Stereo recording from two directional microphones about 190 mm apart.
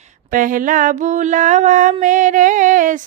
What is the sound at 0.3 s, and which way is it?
Mantra, 45° right (ahead or behind).